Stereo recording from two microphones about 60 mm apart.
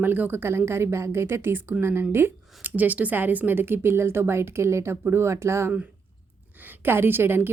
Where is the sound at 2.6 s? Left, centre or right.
Right.